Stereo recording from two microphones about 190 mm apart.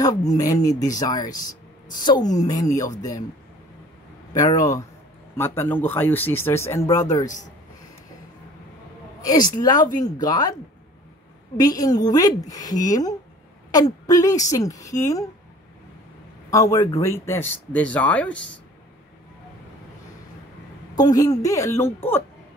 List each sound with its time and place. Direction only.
0.4 s a woman's voice: 20° left (ahead or behind)
4.3 s a woman's voice: 20° left (ahead or behind)
9.2 s a woman's voice: 20° left (ahead or behind)
11.6 s a woman's voice: 20° left (ahead or behind)
16.4 s speech: 15° left (ahead or behind)
20.9 s speech: 20° left (ahead or behind)